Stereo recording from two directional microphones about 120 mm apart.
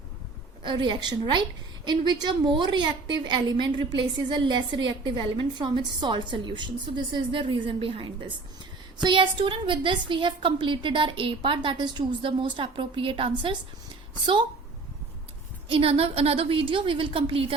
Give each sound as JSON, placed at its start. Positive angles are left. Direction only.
{"t": 0.6, "sound": "a woman's voice", "side_deg": -40}
{"t": 15.7, "sound": "a woman's voice", "side_deg": -50}